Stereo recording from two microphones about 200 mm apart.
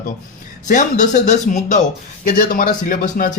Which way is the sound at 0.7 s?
40° left (ahead or behind).